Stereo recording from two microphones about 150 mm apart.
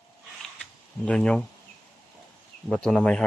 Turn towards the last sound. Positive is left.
turn(degrees=5)  # may be behind; listen again after turning